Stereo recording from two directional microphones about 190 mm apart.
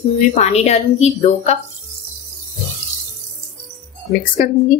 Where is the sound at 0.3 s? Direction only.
40° left (ahead or behind).